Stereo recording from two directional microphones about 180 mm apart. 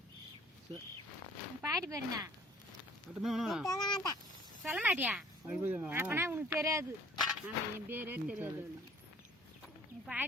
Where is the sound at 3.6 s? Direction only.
20° left (ahead or behind).